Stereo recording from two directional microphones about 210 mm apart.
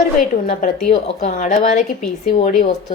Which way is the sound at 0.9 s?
35° left (ahead or behind).